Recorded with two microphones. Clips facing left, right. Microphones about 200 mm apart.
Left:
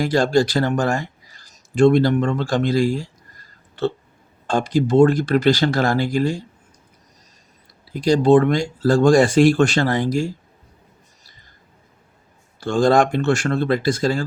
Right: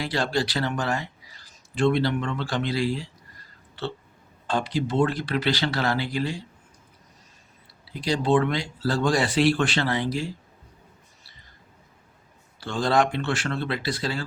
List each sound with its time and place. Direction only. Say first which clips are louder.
0.0 s speech: left 9 dB; 45° left (ahead or behind)
4.4 s speech: left 7 dB; 45° left (ahead or behind)
7.9 s speech: left 8 dB; 45° left (ahead or behind)
12.5 s speech: left 7 dB; 45° left (ahead or behind)